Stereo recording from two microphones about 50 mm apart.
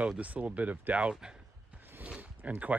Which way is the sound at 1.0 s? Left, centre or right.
Centre.